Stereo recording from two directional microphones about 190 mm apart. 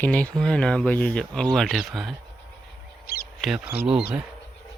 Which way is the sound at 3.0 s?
50° left (ahead or behind).